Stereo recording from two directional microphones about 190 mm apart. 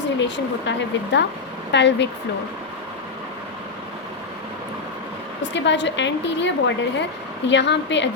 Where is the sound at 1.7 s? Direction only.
65° left (ahead or behind).